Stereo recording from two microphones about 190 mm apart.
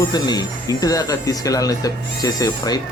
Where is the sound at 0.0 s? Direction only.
20° left (ahead or behind).